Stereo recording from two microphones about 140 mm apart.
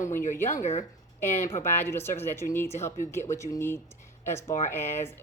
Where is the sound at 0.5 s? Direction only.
50° left (ahead or behind).